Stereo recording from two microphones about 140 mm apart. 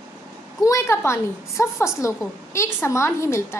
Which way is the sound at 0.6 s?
20° left (ahead or behind).